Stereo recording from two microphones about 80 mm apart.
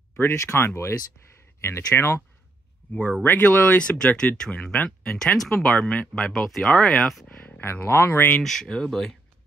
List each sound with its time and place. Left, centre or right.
0.1 s speech: left
2.0 s speech: left
2.9 s speech: centre
7.2 s speech: centre
8.4 s speech: centre